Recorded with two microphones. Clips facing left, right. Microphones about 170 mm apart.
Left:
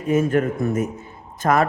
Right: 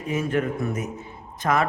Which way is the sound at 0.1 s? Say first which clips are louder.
Left 6 dB; 45° left (ahead or behind).